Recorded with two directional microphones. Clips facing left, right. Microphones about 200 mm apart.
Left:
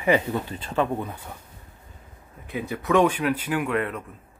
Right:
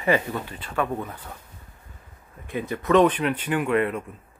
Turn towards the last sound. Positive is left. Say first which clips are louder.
# right 3 dB
turn(degrees=0)  # may be behind; listen again after turning